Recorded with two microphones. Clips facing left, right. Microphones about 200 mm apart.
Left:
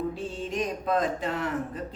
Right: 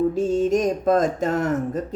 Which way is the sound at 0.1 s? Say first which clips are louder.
Right 13 dB; 45° right (ahead or behind).